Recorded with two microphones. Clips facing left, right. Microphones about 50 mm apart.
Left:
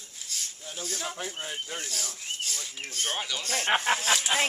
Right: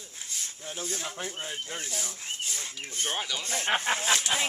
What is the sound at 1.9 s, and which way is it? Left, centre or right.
Speech, right.